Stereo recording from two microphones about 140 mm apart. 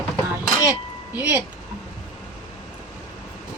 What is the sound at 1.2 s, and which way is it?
Speech, 10° right (ahead or behind).